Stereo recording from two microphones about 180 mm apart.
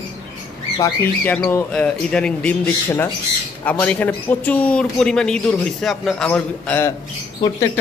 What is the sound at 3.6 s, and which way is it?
Speech, 5° left (ahead or behind).